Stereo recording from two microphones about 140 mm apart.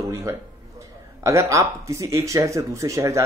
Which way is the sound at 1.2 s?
20° right (ahead or behind).